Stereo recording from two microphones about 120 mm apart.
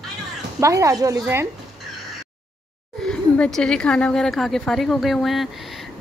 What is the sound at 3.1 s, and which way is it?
A woman's voice, 5° left (ahead or behind).